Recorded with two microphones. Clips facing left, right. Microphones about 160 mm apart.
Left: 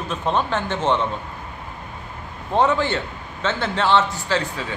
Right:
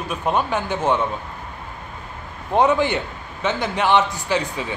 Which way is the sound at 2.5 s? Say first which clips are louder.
Right 2 dB; 15° right (ahead or behind).